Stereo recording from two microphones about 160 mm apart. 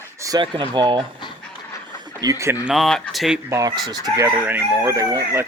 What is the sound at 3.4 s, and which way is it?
Speech, 20° right (ahead or behind).